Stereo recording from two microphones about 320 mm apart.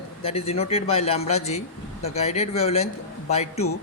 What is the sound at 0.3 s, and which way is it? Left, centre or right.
Speech, centre.